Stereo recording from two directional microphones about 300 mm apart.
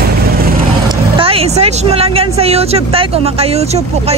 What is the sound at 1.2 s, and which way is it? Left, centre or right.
Speech, centre.